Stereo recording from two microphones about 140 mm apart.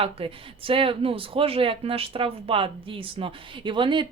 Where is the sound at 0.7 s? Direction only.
40° right (ahead or behind).